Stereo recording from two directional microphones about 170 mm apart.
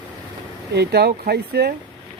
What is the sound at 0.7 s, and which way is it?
Speech, 70° right (ahead or behind).